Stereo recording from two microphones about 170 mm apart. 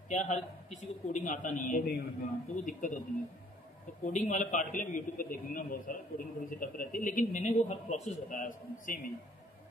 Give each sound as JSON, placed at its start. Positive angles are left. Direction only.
{"t": 0.1, "sound": "a man's voice", "side_deg": 45}
{"t": 4.0, "sound": "a man's voice", "side_deg": 45}